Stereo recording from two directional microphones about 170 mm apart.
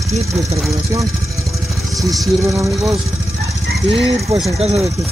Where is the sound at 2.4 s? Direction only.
15° right (ahead or behind).